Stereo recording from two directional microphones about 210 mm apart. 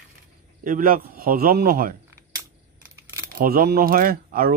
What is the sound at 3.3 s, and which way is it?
Speech, 45° right (ahead or behind).